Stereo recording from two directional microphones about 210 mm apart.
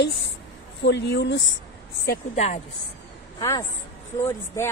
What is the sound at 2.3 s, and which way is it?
Speech, 35° left (ahead or behind).